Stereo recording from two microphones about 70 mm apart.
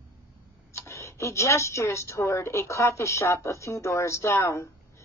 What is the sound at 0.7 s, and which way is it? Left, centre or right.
A woman's voice, left.